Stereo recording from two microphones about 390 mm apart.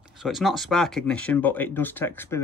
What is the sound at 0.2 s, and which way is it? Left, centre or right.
Speech, centre.